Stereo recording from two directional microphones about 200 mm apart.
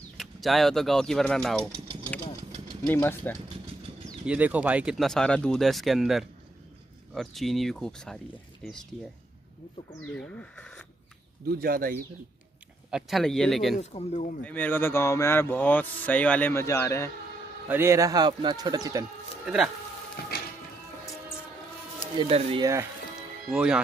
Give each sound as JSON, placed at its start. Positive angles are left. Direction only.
{"t": 0.2, "sound": "speech", "side_deg": 0}
{"t": 2.9, "sound": "speech", "side_deg": 10}
{"t": 4.3, "sound": "speech", "side_deg": -5}
{"t": 9.9, "sound": "speech", "side_deg": 5}
{"t": 11.4, "sound": "speech", "side_deg": -50}
{"t": 12.9, "sound": "speech", "side_deg": 0}
{"t": 13.7, "sound": "speech", "side_deg": 35}
{"t": 14.4, "sound": "speech", "side_deg": 10}
{"t": 17.6, "sound": "speech", "side_deg": -15}
{"t": 19.4, "sound": "speech", "side_deg": -5}
{"t": 20.2, "sound": "music", "side_deg": 50}
{"t": 22.1, "sound": "speech", "side_deg": -25}
{"t": 23.5, "sound": "speech", "side_deg": -5}